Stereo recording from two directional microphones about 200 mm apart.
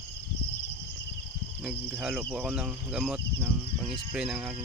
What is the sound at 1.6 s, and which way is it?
Speech, 5° right (ahead or behind).